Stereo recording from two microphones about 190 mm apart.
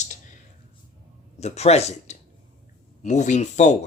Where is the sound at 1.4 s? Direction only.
35° left (ahead or behind).